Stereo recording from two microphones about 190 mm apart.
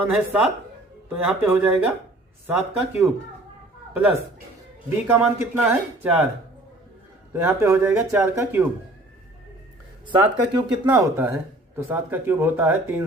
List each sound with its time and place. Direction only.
0.0 s speech: 5° right (ahead or behind)
5.0 s speech: 5° right (ahead or behind)
7.3 s speech: 10° right (ahead or behind)
10.1 s speech: 25° right (ahead or behind)